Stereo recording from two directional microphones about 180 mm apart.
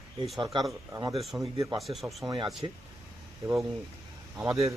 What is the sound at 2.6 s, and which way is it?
Speech, 25° right (ahead or behind).